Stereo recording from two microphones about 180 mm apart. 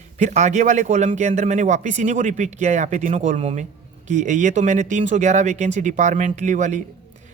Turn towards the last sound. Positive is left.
turn(degrees=-40)  # may be behind; listen again after turning